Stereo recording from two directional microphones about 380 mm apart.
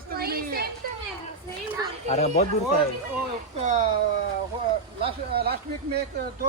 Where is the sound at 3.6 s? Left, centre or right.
Centre.